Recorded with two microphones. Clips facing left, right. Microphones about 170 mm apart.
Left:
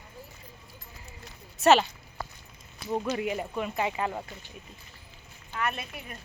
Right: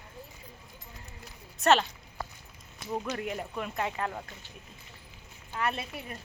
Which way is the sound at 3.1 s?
5° left (ahead or behind).